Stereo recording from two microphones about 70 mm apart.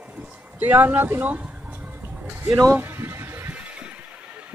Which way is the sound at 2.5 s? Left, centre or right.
Right.